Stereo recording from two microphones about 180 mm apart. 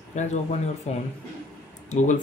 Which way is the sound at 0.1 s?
40° left (ahead or behind).